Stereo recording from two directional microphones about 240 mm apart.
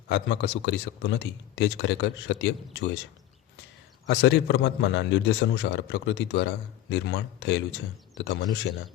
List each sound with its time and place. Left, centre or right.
0.1 s a man's voice: left
4.0 s a man's voice: left